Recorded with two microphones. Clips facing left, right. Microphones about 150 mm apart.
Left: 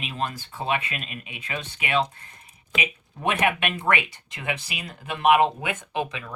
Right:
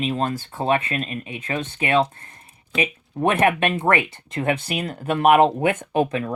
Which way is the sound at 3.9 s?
50° right (ahead or behind).